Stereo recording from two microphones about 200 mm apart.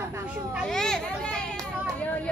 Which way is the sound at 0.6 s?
5° left (ahead or behind).